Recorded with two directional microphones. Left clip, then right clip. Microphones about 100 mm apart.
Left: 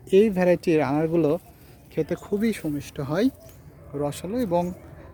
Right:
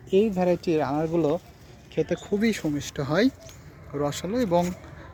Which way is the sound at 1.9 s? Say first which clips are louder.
Right 1 dB; 55° left (ahead or behind).